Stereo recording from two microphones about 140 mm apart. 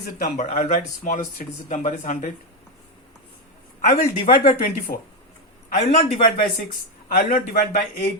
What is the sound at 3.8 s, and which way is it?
Speech, 65° left (ahead or behind).